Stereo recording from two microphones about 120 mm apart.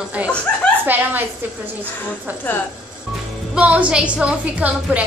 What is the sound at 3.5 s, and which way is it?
A woman's voice, 10° right (ahead or behind).